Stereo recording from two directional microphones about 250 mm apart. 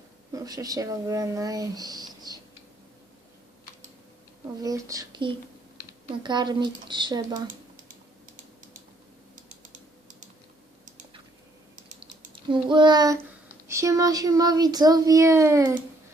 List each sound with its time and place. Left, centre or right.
0.3 s speech: centre
4.6 s speech: centre
9.5 s typing: right
11.9 s a sound: right
13.7 s speech: centre